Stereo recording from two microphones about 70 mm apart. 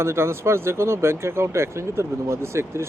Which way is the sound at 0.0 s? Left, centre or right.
Right.